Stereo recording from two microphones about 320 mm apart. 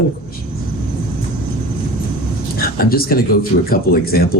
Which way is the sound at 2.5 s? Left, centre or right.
Left.